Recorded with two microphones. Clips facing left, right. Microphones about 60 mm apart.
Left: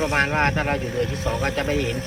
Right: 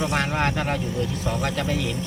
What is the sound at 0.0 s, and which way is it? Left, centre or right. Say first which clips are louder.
Speech: left 3 dB; left.